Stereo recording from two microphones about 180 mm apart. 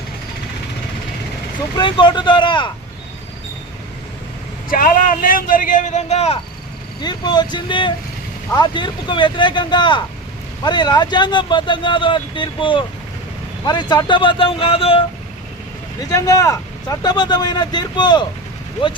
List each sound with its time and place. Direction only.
1.7 s speech: 25° left (ahead or behind)
4.7 s a man's voice: 50° left (ahead or behind)
7.0 s speech: 25° left (ahead or behind)
16.0 s speech: 20° left (ahead or behind)